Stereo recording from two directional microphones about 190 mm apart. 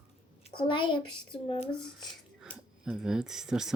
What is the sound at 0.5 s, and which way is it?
A child's voice, 25° left (ahead or behind).